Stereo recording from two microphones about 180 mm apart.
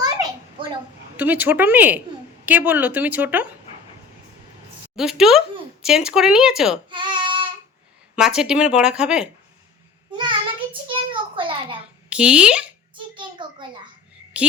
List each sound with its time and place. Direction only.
1.1 s speech: 10° right (ahead or behind)
4.9 s speech: centre (ahead or behind)
6.9 s child singing: 25° right (ahead or behind)
8.1 s speech: 5° right (ahead or behind)
10.1 s a sound: 25° right (ahead or behind)
12.0 s speech: 5° right (ahead or behind)
13.4 s a sound: 25° right (ahead or behind)